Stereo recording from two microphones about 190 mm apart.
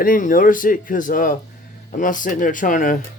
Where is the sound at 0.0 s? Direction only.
45° left (ahead or behind).